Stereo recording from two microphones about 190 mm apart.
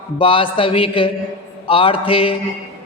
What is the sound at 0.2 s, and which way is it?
A man's voice, 25° left (ahead or behind).